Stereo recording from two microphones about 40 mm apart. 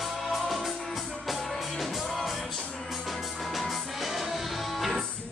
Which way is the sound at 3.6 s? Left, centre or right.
Centre.